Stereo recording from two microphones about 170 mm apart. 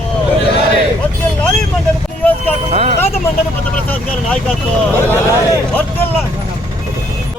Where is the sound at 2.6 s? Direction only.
40° right (ahead or behind).